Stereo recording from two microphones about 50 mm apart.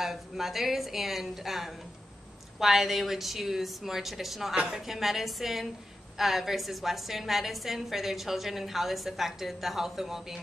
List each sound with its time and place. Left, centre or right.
0.0 s a woman's voice: centre